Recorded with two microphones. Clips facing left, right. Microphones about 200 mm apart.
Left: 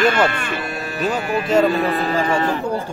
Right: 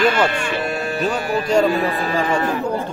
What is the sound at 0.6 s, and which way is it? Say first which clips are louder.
Speech: right 3 dB; 30° right (ahead or behind).